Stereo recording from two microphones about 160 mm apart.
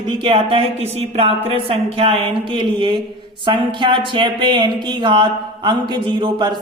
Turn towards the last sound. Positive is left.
turn(degrees=-30)  # may be behind; listen again after turning